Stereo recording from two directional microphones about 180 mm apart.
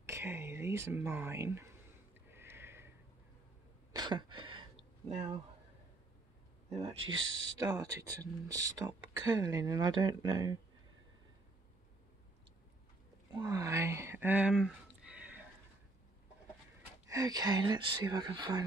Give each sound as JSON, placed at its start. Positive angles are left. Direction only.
{"t": 0.0, "sound": "speech", "side_deg": -15}
{"t": 2.2, "sound": "a sound", "side_deg": -15}
{"t": 3.9, "sound": "a sound", "side_deg": -25}
{"t": 5.1, "sound": "speech", "side_deg": -35}
{"t": 6.7, "sound": "speech", "side_deg": -35}
{"t": 7.0, "sound": "speech", "side_deg": -90}
{"t": 7.5, "sound": "speech", "side_deg": -20}
{"t": 13.3, "sound": "speech", "side_deg": -20}
{"t": 17.1, "sound": "speech", "side_deg": -20}